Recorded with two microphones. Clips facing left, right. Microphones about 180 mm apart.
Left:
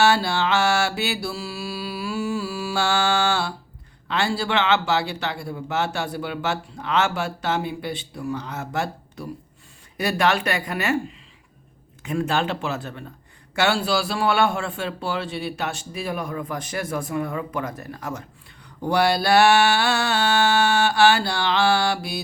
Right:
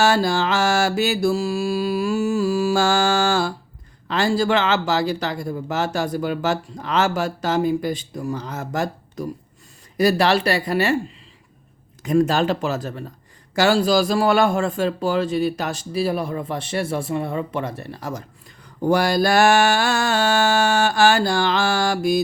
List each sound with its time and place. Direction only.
0.0 s mantra: 40° right (ahead or behind)
4.1 s speech: 40° right (ahead or behind)
12.0 s speech: 40° right (ahead or behind)
18.9 s mantra: 45° right (ahead or behind)